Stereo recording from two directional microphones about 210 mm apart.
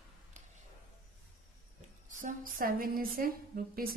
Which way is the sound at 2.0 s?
40° right (ahead or behind).